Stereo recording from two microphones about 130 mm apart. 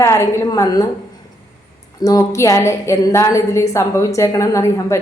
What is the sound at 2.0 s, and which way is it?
A woman's voice, 25° left (ahead or behind).